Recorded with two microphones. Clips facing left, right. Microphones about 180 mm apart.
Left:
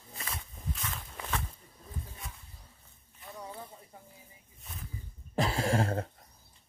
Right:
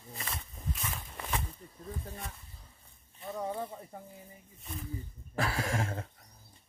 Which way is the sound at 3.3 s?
55° right (ahead or behind).